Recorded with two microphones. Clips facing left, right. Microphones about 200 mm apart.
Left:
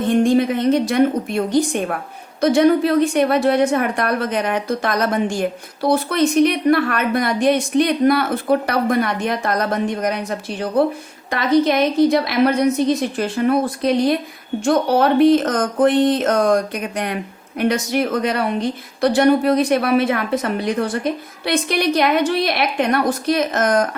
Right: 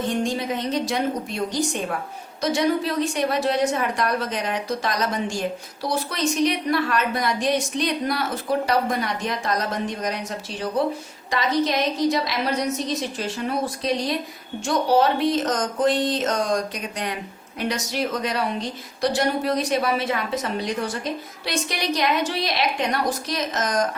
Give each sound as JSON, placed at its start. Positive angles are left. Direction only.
{"t": 0.1, "sound": "a woman's voice", "side_deg": 55}